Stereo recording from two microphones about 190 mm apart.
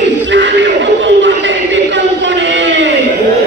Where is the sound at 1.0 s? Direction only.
70° right (ahead or behind).